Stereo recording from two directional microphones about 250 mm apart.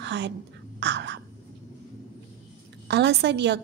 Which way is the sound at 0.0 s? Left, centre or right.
Right.